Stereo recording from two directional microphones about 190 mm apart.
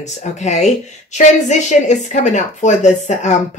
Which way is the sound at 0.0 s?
40° left (ahead or behind).